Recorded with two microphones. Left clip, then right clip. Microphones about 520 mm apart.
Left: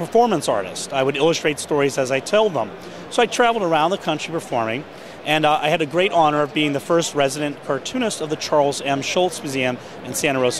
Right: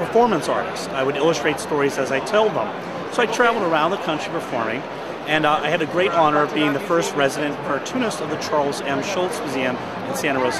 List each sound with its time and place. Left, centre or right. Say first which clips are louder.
0.1 s speech: left 1 dB; left
5.3 s speech: left 1 dB; left